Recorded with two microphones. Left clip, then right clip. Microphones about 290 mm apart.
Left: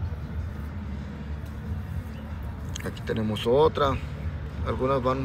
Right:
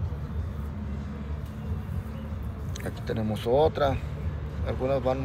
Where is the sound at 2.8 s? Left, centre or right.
Centre.